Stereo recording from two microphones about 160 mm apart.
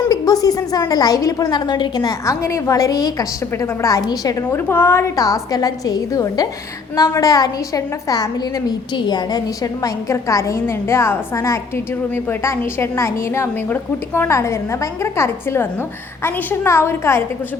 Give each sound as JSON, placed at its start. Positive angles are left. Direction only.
{"t": 0.1, "sound": "a woman's voice", "side_deg": 25}